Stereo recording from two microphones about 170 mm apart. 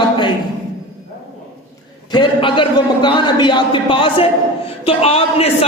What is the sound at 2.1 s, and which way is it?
A man's voice, 30° left (ahead or behind).